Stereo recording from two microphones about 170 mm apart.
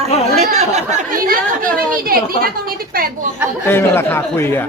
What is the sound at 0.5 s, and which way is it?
A woman's voice, 40° right (ahead or behind).